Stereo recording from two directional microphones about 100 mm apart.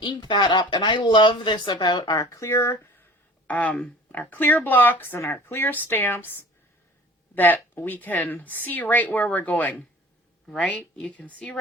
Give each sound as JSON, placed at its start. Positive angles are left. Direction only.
{"t": 0.0, "sound": "speech", "side_deg": 50}
{"t": 2.2, "sound": "speech", "side_deg": 30}
{"t": 7.3, "sound": "speech", "side_deg": 20}